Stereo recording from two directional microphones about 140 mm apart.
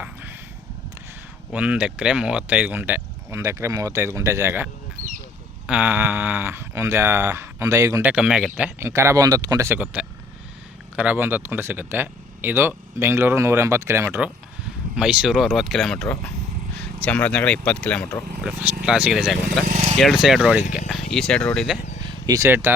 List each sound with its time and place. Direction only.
0.0 s a sound: 15° right (ahead or behind)
1.5 s speech: 10° right (ahead or behind)
5.0 s a sound: 65° right (ahead or behind)
5.6 s speech: 10° right (ahead or behind)
8.0 s speech: 10° right (ahead or behind)
8.8 s speech: 20° right (ahead or behind)
9.6 s speech: 10° right (ahead or behind)
14.9 s speech: 5° right (ahead or behind); by 18.2 s 10° left (ahead or behind)
18.4 s speech: 10° right (ahead or behind)
21.1 s speech: 5° left (ahead or behind)
22.3 s speech: 20° right (ahead or behind)